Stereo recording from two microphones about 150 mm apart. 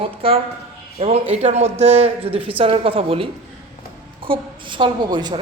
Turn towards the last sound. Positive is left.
turn(degrees=-30)  # may be behind; listen again after turning